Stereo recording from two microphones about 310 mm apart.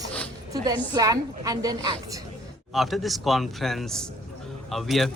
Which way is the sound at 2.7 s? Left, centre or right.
Centre.